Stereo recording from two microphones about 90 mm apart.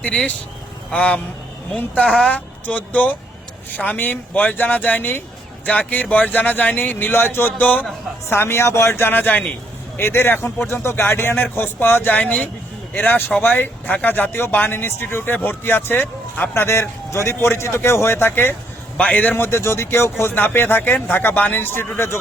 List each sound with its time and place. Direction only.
0.0 s speech: 15° left (ahead or behind)
19.4 s speech: 30° left (ahead or behind)